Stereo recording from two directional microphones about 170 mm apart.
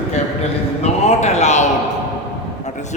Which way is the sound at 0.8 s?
40° left (ahead or behind).